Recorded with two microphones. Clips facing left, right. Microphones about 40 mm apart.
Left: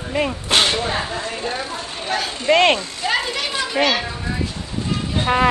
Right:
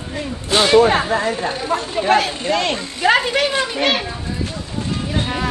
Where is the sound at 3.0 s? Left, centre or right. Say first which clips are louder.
Right 7 dB; right.